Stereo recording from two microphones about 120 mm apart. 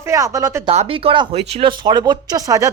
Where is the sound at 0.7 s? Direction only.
55° right (ahead or behind).